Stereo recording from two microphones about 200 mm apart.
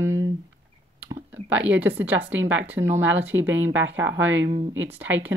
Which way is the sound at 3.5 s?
70° right (ahead or behind).